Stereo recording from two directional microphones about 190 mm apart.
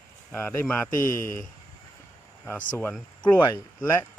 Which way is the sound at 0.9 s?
45° left (ahead or behind).